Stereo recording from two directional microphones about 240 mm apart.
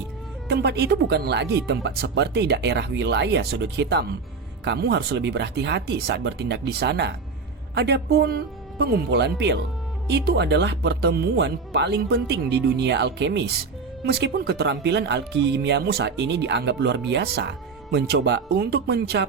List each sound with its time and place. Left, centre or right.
0.4 s speech: right